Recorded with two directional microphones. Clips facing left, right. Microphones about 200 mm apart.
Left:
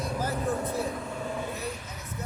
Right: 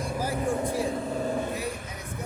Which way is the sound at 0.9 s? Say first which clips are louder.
Right 5 dB; 40° right (ahead or behind).